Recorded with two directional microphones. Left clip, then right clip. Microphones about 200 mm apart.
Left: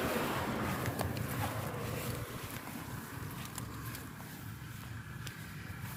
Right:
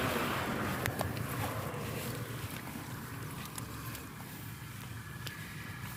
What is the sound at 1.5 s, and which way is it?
Dog, 40° right (ahead or behind).